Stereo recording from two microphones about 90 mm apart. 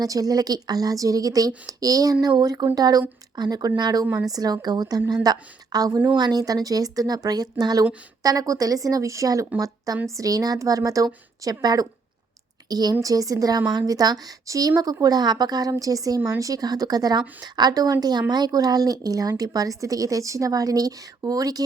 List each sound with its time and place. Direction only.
0.0 s a woman's voice: 45° right (ahead or behind)